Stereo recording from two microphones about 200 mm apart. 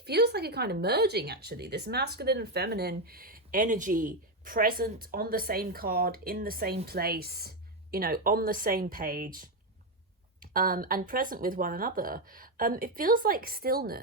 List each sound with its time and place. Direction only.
0.0 s a woman's voice: 55° right (ahead or behind)